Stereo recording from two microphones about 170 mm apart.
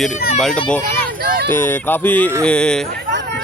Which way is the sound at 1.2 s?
60° right (ahead or behind).